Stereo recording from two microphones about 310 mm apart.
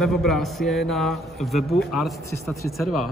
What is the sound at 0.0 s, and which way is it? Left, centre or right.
A man's voice, centre.